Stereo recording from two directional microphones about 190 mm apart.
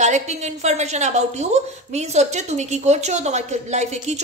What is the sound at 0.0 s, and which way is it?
A woman's voice, 35° right (ahead or behind).